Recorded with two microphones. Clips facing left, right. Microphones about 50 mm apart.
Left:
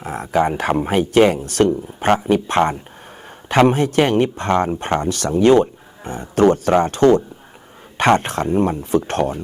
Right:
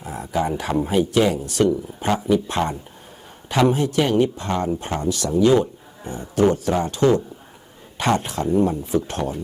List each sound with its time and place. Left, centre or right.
0.0 s speech: left